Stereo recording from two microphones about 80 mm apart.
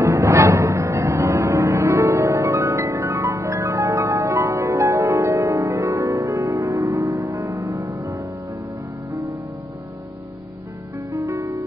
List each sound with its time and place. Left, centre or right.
0.0 s music: right
11.1 s music: right